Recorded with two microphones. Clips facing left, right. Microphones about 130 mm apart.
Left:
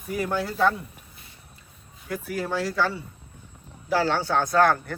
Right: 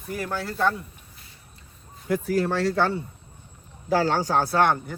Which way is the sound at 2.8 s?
60° right (ahead or behind).